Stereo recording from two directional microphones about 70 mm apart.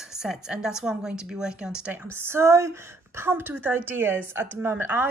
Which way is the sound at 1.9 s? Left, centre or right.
Right.